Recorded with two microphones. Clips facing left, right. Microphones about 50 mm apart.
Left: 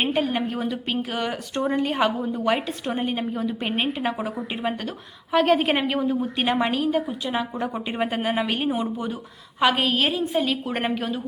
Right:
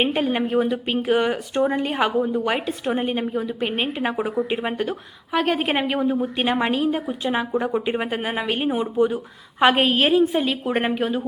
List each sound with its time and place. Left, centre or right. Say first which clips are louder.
0.2 s a woman's voice: right 4 dB; centre
5.3 s a woman's voice: left 2 dB; centre
9.6 s a woman's voice: right 3 dB; right